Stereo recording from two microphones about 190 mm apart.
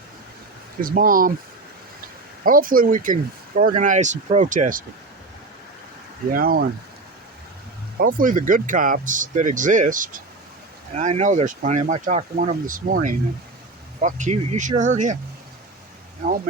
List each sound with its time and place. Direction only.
0.8 s speech: 50° right (ahead or behind)
6.3 s speech: 50° right (ahead or behind)
7.9 s speech: 45° right (ahead or behind)